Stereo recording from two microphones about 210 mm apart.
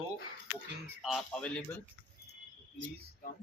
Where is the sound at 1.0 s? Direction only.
Centre (ahead or behind).